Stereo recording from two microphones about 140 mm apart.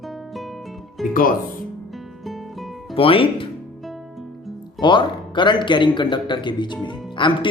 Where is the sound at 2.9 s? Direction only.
40° left (ahead or behind).